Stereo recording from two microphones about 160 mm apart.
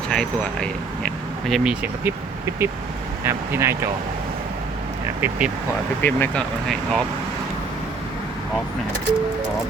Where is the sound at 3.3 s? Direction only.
15° right (ahead or behind).